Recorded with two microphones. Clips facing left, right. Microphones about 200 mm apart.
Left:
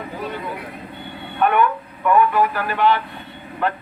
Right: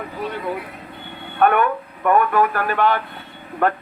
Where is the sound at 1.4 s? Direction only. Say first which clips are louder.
Right 1 dB; 50° right (ahead or behind).